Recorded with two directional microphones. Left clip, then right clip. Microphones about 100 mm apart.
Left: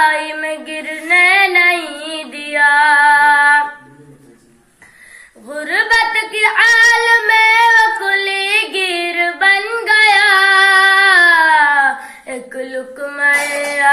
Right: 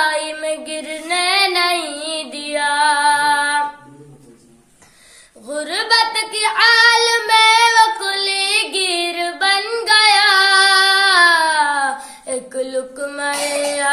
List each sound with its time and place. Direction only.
0.4 s female singing: 45° right (ahead or behind)
5.5 s a sound: 40° right (ahead or behind)
6.3 s child singing: 35° right (ahead or behind)
9.3 s female singing: 40° right (ahead or behind)
12.3 s child singing: 40° right (ahead or behind)